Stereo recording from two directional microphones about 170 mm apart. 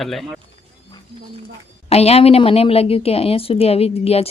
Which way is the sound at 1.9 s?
35° left (ahead or behind).